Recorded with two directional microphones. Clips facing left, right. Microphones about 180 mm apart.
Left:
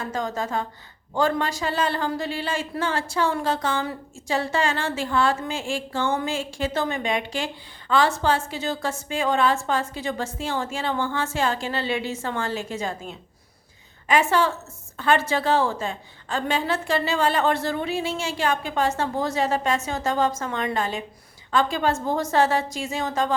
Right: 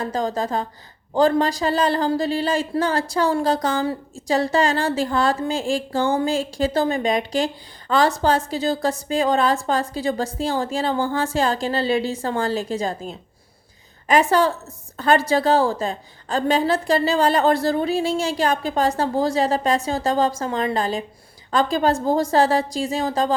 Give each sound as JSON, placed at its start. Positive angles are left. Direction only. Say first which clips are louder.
{"t": 0.0, "sound": "speech", "louder": "right 4 dB", "side_deg": -35}